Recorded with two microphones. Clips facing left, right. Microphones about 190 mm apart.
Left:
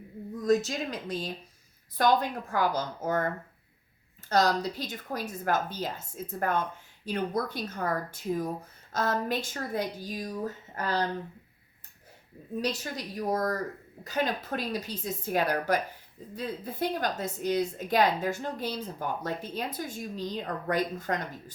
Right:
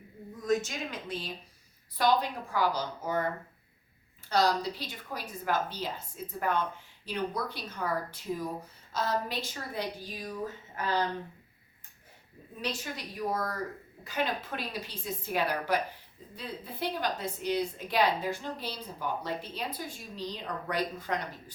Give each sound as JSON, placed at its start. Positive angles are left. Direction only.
{"t": 0.4, "sound": "a woman's voice", "side_deg": 35}
{"t": 4.3, "sound": "a woman's voice", "side_deg": 45}
{"t": 12.6, "sound": "a woman's voice", "side_deg": 40}